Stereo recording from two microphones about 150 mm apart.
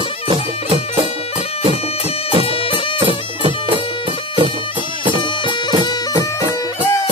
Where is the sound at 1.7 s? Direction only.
40° left (ahead or behind).